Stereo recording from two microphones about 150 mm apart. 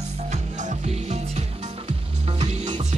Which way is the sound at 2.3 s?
45° right (ahead or behind).